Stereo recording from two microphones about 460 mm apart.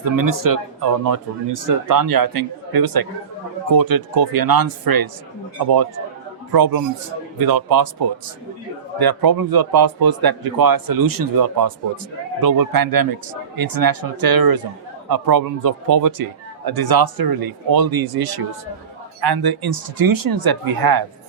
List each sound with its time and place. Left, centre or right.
0.0 s speech: right